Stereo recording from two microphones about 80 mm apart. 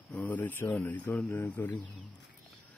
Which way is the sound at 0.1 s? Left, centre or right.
Centre.